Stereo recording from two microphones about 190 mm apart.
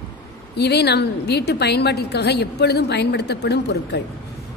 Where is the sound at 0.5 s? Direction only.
60° left (ahead or behind).